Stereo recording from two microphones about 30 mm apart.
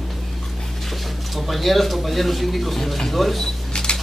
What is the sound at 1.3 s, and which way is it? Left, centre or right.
Speech, centre.